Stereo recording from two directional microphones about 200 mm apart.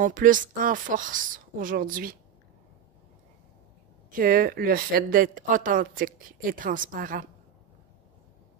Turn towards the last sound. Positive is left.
turn(degrees=-45)  # may be behind; listen again after turning